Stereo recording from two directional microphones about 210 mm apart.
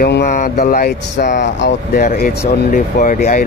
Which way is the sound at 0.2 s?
35° left (ahead or behind).